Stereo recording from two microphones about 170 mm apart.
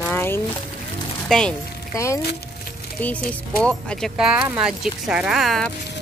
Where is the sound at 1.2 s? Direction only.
5° left (ahead or behind).